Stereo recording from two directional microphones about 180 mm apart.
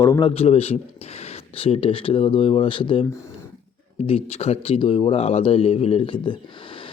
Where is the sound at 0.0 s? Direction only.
20° left (ahead or behind).